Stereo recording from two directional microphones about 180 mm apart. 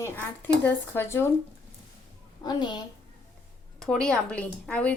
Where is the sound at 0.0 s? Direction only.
10° left (ahead or behind).